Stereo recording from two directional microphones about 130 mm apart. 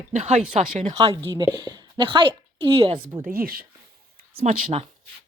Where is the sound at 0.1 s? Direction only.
65° right (ahead or behind).